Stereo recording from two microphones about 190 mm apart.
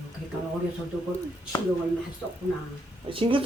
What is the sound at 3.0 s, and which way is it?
Speech, 30° right (ahead or behind).